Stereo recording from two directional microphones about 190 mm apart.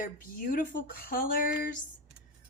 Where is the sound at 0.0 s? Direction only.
45° left (ahead or behind).